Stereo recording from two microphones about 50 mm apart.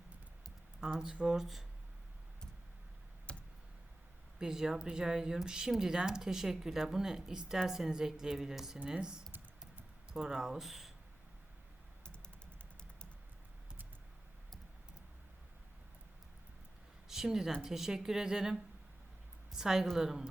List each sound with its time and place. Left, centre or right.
0.8 s speech: centre
3.3 s a sound: left
4.4 s speech: centre
17.1 s speech: centre